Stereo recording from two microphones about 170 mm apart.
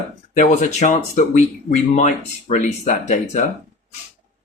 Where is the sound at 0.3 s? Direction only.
45° left (ahead or behind).